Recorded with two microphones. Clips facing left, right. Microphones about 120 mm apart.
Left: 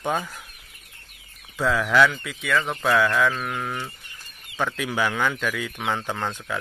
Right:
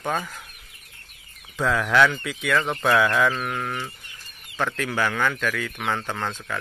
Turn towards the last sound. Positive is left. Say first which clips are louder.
# left 1 dB
turn(degrees=15)  # may be behind; listen again after turning